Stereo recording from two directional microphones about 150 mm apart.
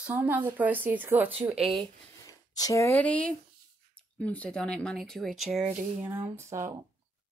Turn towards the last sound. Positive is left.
turn(degrees=-20)  # may be behind; listen again after turning